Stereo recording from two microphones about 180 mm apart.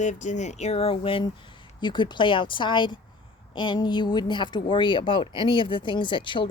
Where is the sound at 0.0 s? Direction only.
40° left (ahead or behind).